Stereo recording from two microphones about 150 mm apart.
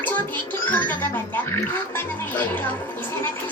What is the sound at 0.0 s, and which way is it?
Speech, 10° left (ahead or behind).